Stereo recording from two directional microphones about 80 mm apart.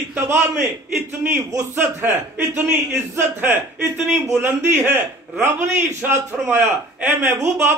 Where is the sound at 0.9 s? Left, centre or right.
Right.